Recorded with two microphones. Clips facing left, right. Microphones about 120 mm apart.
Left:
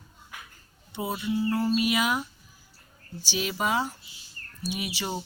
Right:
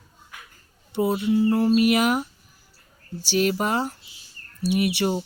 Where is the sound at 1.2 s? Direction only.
65° right (ahead or behind).